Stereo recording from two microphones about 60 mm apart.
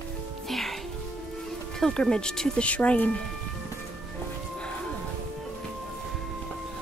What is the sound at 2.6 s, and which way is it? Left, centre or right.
Speech, left.